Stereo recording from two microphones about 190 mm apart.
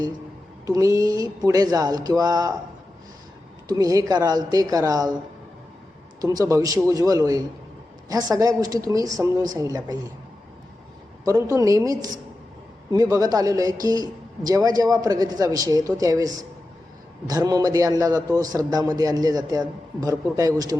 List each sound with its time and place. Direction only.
0.6 s a man's voice: 15° right (ahead or behind)
3.7 s a man's voice: 20° right (ahead or behind)
6.2 s a man's voice: 15° right (ahead or behind)
11.3 s a man's voice: 15° right (ahead or behind)